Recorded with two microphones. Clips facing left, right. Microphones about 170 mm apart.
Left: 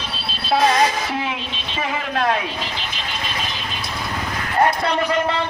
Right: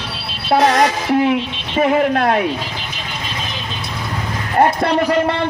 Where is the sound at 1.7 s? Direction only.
50° right (ahead or behind).